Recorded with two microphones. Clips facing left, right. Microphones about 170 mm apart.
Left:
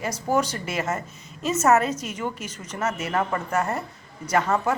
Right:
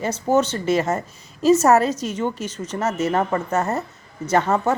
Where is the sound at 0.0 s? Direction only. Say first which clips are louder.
Right 5 dB; 25° right (ahead or behind).